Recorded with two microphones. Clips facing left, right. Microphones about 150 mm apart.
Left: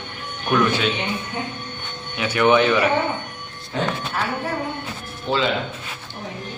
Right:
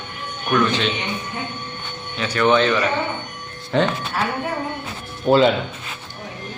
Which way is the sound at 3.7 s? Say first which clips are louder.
Right 6 dB; 75° right (ahead or behind).